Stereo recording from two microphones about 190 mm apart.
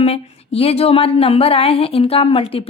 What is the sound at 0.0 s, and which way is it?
Speech, 35° left (ahead or behind).